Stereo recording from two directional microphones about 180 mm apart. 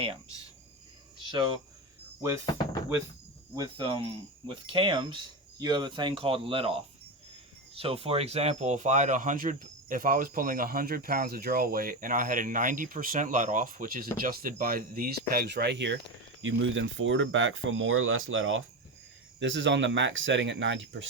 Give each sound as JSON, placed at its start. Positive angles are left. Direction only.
{"t": 3.5, "sound": "speech", "side_deg": -25}
{"t": 7.8, "sound": "speech", "side_deg": -30}
{"t": 16.4, "sound": "speech", "side_deg": -90}